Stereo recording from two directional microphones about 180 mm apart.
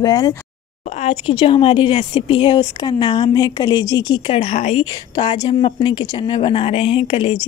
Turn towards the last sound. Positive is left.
turn(degrees=30)  # may be behind; listen again after turning